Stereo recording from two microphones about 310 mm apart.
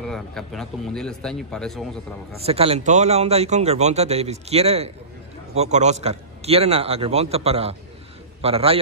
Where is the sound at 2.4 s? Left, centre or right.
Centre.